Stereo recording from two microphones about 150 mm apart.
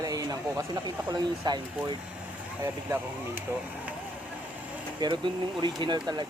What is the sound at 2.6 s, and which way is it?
Speech, 15° right (ahead or behind).